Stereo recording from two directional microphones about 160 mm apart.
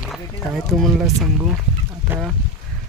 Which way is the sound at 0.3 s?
Centre (ahead or behind).